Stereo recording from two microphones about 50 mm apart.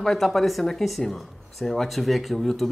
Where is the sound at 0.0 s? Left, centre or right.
Centre.